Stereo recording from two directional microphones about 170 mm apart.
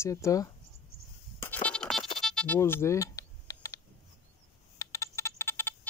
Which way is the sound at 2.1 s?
5° left (ahead or behind).